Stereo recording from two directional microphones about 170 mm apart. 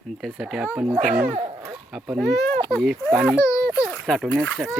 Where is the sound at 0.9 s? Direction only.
45° right (ahead or behind).